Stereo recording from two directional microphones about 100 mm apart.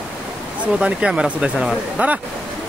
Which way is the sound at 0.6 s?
10° right (ahead or behind).